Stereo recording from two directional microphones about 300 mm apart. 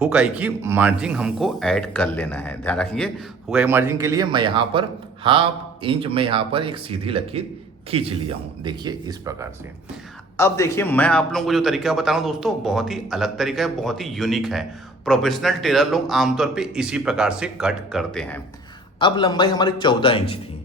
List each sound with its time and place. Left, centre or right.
0.0 s a man's voice: centre
10.3 s a man's voice: centre
18.9 s a man's voice: centre